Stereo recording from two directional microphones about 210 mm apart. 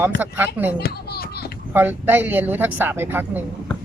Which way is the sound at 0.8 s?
50° left (ahead or behind).